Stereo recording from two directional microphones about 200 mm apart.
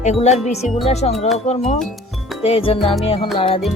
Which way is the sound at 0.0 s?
35° left (ahead or behind).